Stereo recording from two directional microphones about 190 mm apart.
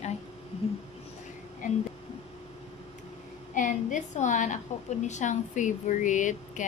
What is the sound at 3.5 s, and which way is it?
Speech, 40° left (ahead or behind).